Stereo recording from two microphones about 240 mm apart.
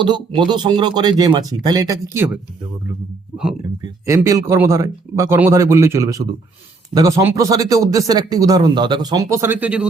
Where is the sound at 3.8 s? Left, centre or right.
Centre.